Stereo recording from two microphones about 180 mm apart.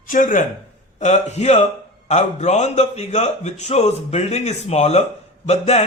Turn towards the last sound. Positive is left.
turn(degrees=35)  # may be behind; listen again after turning